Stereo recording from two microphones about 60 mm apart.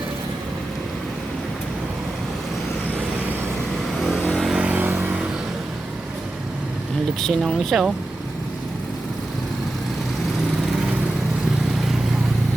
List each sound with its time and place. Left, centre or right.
4.3 s vehicle: centre
4.5 s vehicle: centre
4.8 s vehicle: right
7.2 s speech: centre